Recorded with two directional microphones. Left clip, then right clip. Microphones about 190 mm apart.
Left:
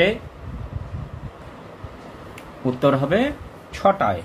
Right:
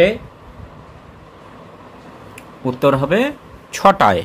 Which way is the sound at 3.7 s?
45° right (ahead or behind).